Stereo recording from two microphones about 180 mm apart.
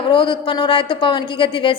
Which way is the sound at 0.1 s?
30° left (ahead or behind).